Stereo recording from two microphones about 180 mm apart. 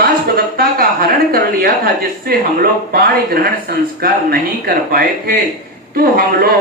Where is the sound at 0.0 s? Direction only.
55° right (ahead or behind).